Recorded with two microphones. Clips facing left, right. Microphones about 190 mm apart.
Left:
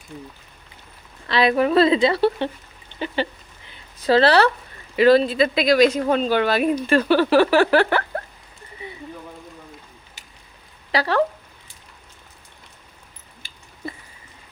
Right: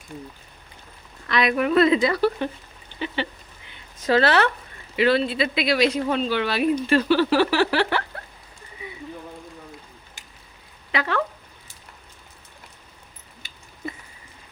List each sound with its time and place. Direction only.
1.3 s a woman's voice: 30° left (ahead or behind)
3.2 s speech: 40° left (ahead or behind)
10.9 s speech: 35° left (ahead or behind)